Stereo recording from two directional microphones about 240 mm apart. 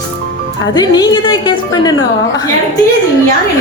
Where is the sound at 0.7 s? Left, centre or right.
Centre.